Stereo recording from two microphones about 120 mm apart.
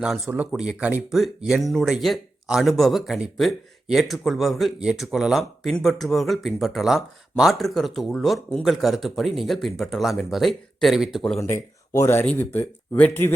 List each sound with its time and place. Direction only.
0.5 s speech: 10° right (ahead or behind)
11.3 s speech: 25° left (ahead or behind)